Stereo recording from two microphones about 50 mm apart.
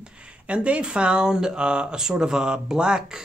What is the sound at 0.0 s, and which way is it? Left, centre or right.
Speech, right.